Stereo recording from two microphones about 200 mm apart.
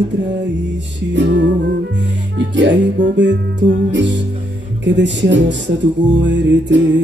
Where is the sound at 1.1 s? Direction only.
65° right (ahead or behind).